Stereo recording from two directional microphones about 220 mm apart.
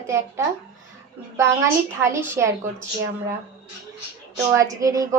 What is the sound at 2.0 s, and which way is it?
Speech, 15° right (ahead or behind).